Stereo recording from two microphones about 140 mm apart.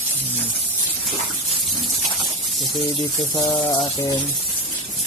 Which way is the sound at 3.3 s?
30° left (ahead or behind).